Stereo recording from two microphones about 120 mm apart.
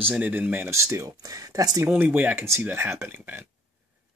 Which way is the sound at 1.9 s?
15° right (ahead or behind).